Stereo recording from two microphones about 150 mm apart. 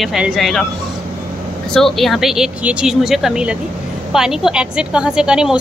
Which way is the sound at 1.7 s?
Centre (ahead or behind).